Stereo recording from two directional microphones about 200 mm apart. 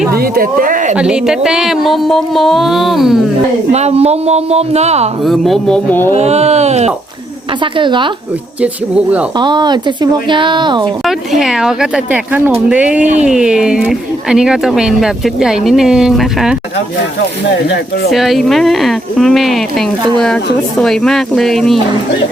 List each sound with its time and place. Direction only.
0.1 s speech: 50° right (ahead or behind)
0.9 s speech: 5° right (ahead or behind)
3.7 s speech: 30° right (ahead or behind)
5.2 s speech: centre (ahead or behind)
6.1 s speech: 35° right (ahead or behind)
8.6 s speech: 5° right (ahead or behind)
9.4 s speech: 20° right (ahead or behind)
11.0 s speech: centre (ahead or behind)
18.1 s speech: centre (ahead or behind)